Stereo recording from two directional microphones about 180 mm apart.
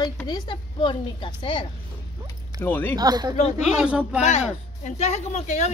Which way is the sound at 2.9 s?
20° right (ahead or behind).